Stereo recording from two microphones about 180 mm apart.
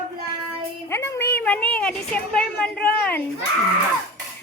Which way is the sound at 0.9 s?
15° left (ahead or behind).